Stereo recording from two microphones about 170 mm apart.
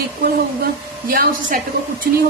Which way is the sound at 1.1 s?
55° right (ahead or behind).